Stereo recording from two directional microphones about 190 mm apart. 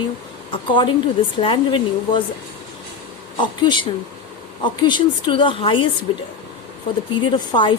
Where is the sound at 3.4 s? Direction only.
25° left (ahead or behind).